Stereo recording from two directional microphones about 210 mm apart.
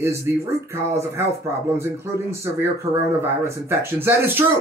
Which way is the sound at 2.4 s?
15° right (ahead or behind).